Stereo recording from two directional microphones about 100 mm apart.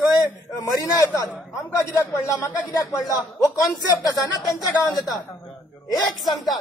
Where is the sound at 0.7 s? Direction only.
35° left (ahead or behind).